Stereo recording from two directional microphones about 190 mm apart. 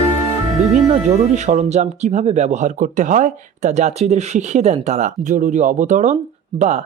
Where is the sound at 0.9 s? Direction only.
35° right (ahead or behind).